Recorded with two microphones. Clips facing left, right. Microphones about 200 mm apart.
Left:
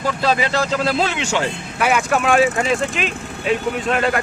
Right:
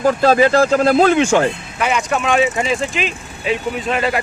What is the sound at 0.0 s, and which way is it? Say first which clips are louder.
Speech: right 7 dB; 50° right (ahead or behind).